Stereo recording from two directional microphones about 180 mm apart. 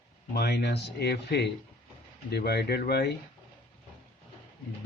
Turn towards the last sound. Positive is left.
turn(degrees=65)  # may be behind; listen again after turning